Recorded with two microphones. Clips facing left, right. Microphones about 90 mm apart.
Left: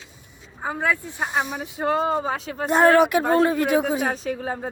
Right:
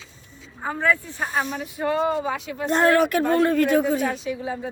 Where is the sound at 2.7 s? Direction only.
15° left (ahead or behind).